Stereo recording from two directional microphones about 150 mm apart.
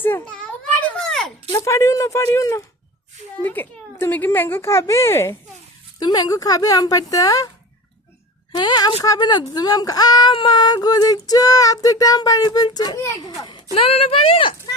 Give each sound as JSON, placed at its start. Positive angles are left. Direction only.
{"t": 0.0, "sound": "a woman's voice", "side_deg": 15}
{"t": 0.9, "sound": "a sound", "side_deg": 5}
{"t": 1.5, "sound": "female singing", "side_deg": 20}
{"t": 3.4, "sound": "a woman's voice", "side_deg": 15}
{"t": 6.0, "sound": "female singing", "side_deg": 30}
{"t": 8.5, "sound": "female singing", "side_deg": 30}
{"t": 13.7, "sound": "speech", "side_deg": 40}